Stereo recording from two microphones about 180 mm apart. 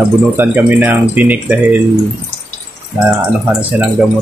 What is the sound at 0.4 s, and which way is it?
Speech, 10° right (ahead or behind).